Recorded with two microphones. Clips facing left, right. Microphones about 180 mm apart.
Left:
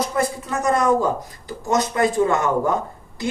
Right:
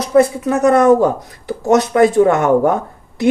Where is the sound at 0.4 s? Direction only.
65° right (ahead or behind).